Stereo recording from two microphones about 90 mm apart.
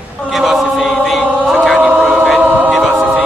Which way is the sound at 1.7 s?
15° right (ahead or behind).